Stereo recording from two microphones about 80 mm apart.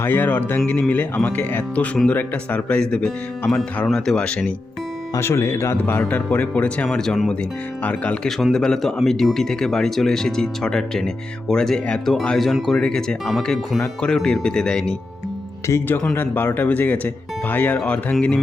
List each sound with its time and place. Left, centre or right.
0.0 s speech: left
5.1 s speech: left; by 8.3 s centre
8.5 s speech: centre
15.7 s speech: left
16.1 s speech: left